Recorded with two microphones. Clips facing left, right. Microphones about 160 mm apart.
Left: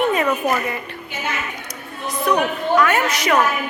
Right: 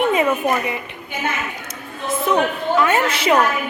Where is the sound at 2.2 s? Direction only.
25° right (ahead or behind).